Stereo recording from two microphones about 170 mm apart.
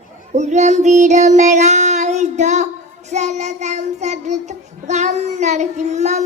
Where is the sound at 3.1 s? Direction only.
40° right (ahead or behind).